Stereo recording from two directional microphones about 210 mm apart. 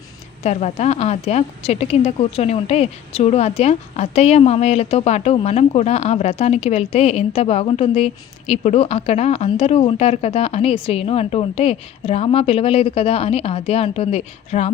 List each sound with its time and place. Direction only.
0.4 s a woman's voice: 30° left (ahead or behind)